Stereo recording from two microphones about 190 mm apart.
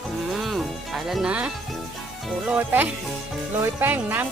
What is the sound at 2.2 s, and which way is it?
Speech, 5° right (ahead or behind).